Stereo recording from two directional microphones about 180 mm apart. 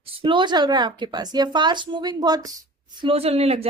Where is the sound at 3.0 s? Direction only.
35° right (ahead or behind).